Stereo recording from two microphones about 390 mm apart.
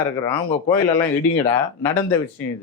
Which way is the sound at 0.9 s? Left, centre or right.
Centre.